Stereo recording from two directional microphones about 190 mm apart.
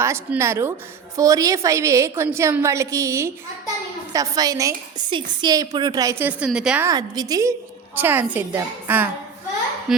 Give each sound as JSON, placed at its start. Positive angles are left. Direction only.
{"t": 0.0, "sound": "a woman's voice", "side_deg": -15}
{"t": 6.8, "sound": "a woman's voice", "side_deg": -20}